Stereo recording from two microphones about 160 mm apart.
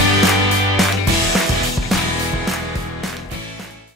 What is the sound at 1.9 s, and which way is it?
Music, centre (ahead or behind).